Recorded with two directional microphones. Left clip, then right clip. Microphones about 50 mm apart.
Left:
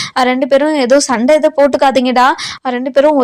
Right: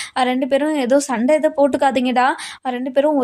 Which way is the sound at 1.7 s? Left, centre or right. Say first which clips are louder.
Left 6 dB; left.